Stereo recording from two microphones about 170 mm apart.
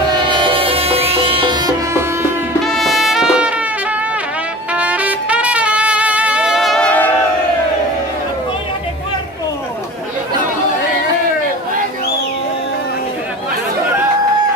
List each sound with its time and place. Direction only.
0.1 s music: 30° right (ahead or behind)
2.6 s music: centre (ahead or behind)
4.7 s music: 10° right (ahead or behind)